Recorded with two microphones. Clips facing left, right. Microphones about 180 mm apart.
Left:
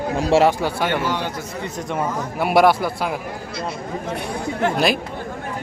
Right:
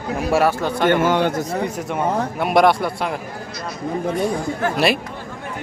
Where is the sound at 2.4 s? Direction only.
5° left (ahead or behind).